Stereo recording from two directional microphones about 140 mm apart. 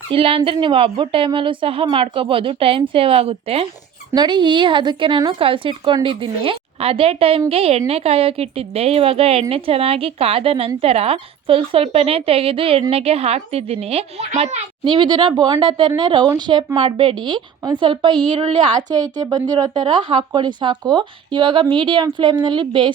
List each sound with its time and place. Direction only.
0.1 s a woman's voice: 40° right (ahead or behind)
4.1 s a woman's voice: 30° right (ahead or behind)